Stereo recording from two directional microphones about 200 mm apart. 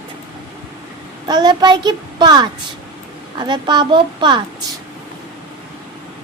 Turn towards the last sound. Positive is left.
turn(degrees=-25)  # may be behind; listen again after turning